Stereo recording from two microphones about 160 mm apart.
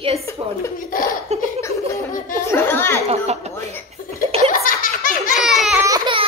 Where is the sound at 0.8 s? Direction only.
60° left (ahead or behind).